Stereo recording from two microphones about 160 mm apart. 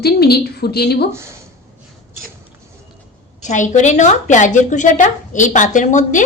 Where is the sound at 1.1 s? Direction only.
15° right (ahead or behind).